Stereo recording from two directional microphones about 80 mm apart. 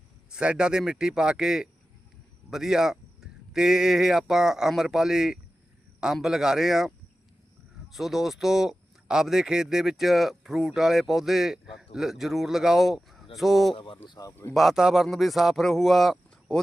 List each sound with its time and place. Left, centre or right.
0.3 s a man's voice: centre
7.9 s a man's voice: centre
13.7 s speech: left
14.5 s a man's voice: centre